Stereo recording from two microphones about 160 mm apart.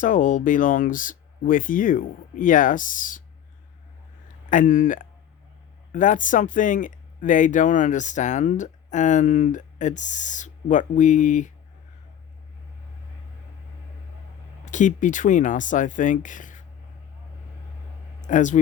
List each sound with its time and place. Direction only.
0.0 s speech: 50° left (ahead or behind)
4.4 s speech: 55° left (ahead or behind)
14.6 s speech: 50° left (ahead or behind)
18.3 s speech: 50° left (ahead or behind)